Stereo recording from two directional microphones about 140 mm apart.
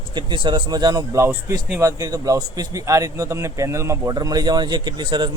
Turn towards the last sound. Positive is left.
turn(degrees=-35)  # may be behind; listen again after turning